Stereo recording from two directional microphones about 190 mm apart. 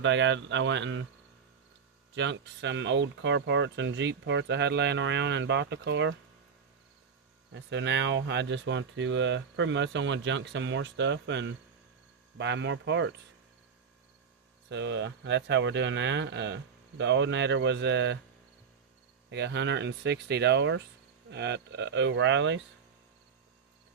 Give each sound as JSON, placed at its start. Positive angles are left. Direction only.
{"t": 0.0, "sound": "speech", "side_deg": -75}
{"t": 2.1, "sound": "speech", "side_deg": -70}
{"t": 7.5, "sound": "speech", "side_deg": -70}
{"t": 14.7, "sound": "speech", "side_deg": -65}
{"t": 19.3, "sound": "speech", "side_deg": -65}